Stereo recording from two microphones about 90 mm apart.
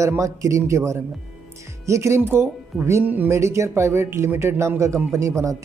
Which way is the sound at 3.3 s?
30° right (ahead or behind).